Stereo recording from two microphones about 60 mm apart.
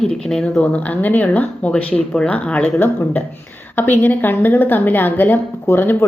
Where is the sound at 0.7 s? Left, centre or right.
Left.